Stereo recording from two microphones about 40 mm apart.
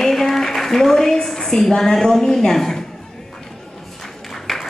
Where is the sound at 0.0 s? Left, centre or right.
Centre.